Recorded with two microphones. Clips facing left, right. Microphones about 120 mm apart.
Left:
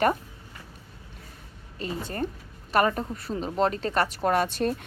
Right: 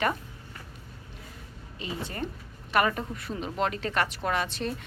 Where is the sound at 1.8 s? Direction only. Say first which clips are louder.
Left 4 dB; 45° left (ahead or behind).